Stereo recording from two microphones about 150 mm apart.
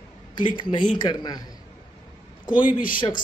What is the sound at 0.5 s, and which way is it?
Speech, 30° left (ahead or behind).